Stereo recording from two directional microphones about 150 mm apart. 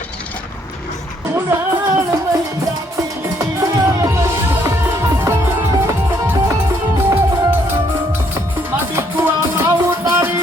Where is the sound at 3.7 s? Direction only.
20° right (ahead or behind).